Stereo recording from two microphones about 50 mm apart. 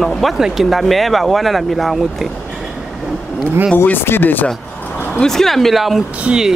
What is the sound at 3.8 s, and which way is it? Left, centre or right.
Speech, left.